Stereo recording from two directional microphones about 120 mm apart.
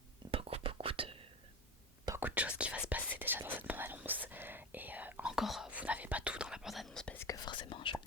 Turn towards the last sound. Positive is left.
turn(degrees=45)  # may be behind; listen again after turning